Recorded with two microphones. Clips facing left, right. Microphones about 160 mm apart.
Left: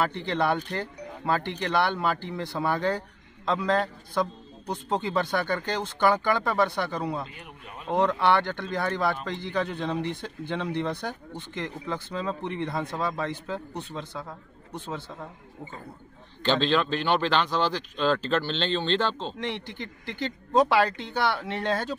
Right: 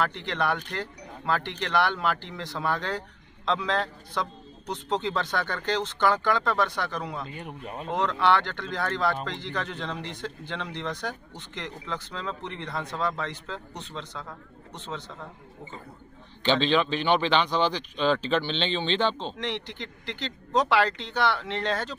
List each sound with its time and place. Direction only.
0.3 s speech: 20° left (ahead or behind)
7.3 s speech: 35° right (ahead or behind)
7.9 s speech: 15° left (ahead or behind)
16.4 s speech: centre (ahead or behind)
19.7 s speech: 20° right (ahead or behind)
20.2 s speech: 15° left (ahead or behind)